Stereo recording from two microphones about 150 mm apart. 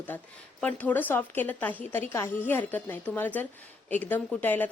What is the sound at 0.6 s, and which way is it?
A woman's voice, 10° left (ahead or behind).